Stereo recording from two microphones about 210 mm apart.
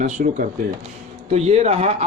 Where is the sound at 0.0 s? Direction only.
35° right (ahead or behind).